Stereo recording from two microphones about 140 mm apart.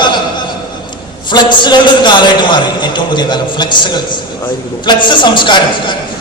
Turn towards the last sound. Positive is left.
turn(degrees=35)  # may be behind; listen again after turning